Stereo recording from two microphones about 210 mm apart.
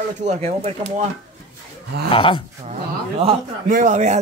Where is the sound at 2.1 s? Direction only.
25° left (ahead or behind).